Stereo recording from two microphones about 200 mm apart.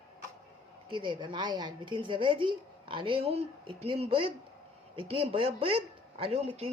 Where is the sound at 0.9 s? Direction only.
25° right (ahead or behind).